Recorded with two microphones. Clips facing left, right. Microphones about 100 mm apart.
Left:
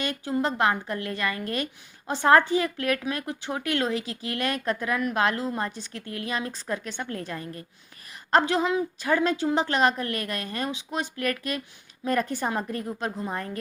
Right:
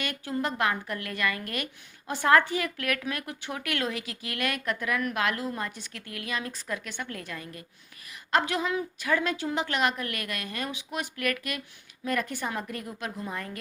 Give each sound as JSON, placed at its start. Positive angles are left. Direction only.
{"t": 0.0, "sound": "a woman's voice", "side_deg": 25}